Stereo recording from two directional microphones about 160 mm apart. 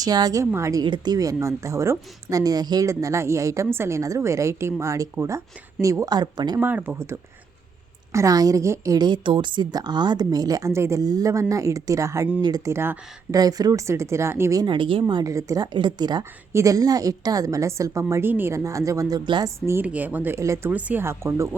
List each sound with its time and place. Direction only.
0.0 s a woman's voice: 25° right (ahead or behind)
6.6 s a woman's voice: 10° right (ahead or behind); by 15.0 s 30° right (ahead or behind)
15.0 s a woman's voice: 20° right (ahead or behind)
19.5 s a woman's voice: 15° right (ahead or behind)